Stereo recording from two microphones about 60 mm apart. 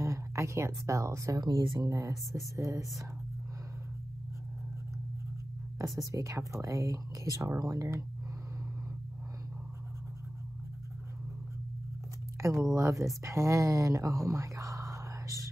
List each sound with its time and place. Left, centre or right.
0.0 s speech: right
5.9 s speech: right
12.4 s speech: right